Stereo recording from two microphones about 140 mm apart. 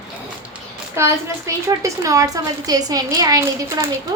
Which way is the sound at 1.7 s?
25° right (ahead or behind).